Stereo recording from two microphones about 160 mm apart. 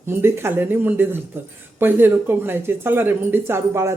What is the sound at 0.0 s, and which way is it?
Speech, 15° right (ahead or behind).